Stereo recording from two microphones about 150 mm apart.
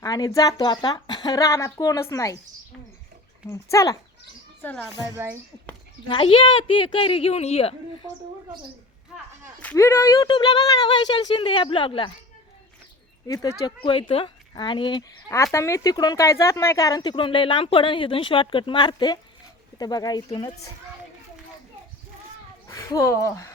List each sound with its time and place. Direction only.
0.0 s speech: 25° left (ahead or behind)
3.5 s speech: 20° left (ahead or behind)
5.0 s a woman's voice: 20° right (ahead or behind)
6.1 s speech: 35° left (ahead or behind)
8.0 s a woman's voice: 30° right (ahead or behind)
9.6 s speech: 15° left (ahead or behind); by 12.1 s 35° left (ahead or behind)
13.2 s speech: 25° left (ahead or behind)
14.1 s speech: 35° left (ahead or behind)
15.5 s speech: 20° left (ahead or behind)
22.6 s speech: 20° left (ahead or behind)